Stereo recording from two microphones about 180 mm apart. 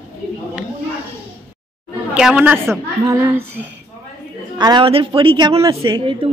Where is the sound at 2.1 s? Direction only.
5° right (ahead or behind).